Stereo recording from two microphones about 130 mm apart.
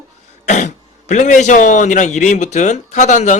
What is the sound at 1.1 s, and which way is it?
A man's voice, 65° left (ahead or behind).